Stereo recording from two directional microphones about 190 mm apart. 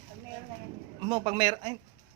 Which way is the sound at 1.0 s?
20° right (ahead or behind).